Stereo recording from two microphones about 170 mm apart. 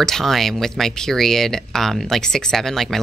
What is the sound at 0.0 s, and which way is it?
Speech, centre (ahead or behind).